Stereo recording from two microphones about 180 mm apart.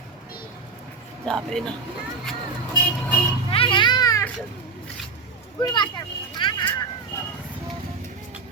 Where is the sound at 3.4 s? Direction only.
30° left (ahead or behind).